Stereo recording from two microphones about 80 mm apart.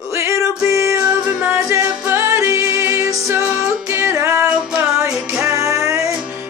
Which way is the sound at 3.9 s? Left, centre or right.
Right.